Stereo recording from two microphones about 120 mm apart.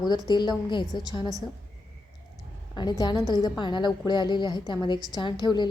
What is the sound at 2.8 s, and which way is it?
A woman's voice, 35° left (ahead or behind).